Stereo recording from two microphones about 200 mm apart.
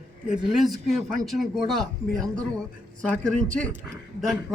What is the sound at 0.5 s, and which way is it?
A man's voice, centre (ahead or behind).